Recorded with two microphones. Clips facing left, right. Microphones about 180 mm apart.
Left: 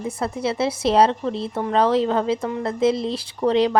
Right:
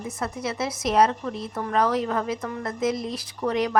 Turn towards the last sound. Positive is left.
turn(degrees=30)  # may be behind; listen again after turning